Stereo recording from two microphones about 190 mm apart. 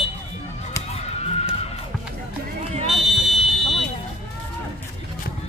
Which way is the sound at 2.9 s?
Centre (ahead or behind).